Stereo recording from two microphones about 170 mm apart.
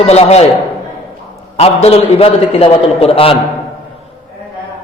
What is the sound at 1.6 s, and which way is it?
A man's voice, 35° left (ahead or behind).